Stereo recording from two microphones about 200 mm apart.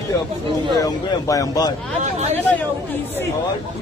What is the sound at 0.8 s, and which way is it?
Speech, 15° left (ahead or behind).